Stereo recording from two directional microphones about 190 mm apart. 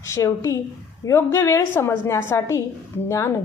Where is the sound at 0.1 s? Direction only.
15° left (ahead or behind).